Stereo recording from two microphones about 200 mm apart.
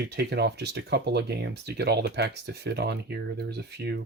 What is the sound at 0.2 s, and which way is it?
Speech, 55° right (ahead or behind).